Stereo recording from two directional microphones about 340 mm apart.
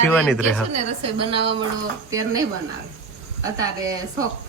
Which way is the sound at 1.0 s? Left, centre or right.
Centre.